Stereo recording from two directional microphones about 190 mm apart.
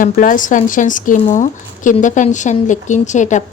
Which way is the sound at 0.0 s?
45° left (ahead or behind).